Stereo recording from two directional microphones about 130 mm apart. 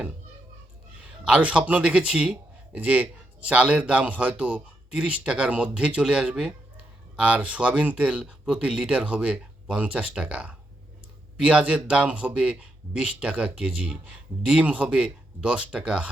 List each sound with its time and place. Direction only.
1.0 s speech: 10° right (ahead or behind)